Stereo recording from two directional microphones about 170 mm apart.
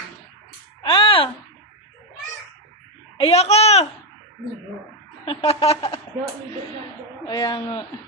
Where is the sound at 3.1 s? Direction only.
35° left (ahead or behind).